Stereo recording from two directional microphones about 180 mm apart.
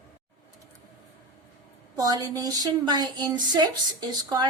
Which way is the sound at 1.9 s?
20° right (ahead or behind).